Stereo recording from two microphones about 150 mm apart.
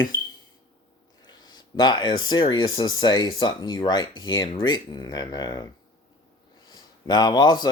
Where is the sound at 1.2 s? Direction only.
30° left (ahead or behind).